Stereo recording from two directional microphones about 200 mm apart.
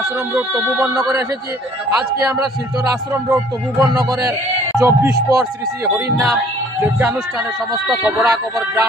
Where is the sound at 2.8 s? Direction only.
15° right (ahead or behind).